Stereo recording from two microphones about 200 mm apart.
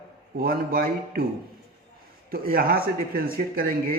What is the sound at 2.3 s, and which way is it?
Speech, 45° right (ahead or behind).